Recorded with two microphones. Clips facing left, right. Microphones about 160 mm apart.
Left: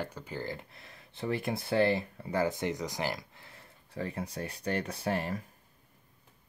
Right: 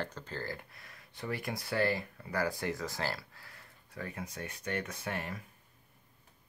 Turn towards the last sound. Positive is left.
turn(degrees=35)  # may be behind; listen again after turning